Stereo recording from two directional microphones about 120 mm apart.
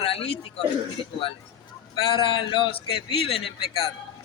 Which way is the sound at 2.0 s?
45° left (ahead or behind).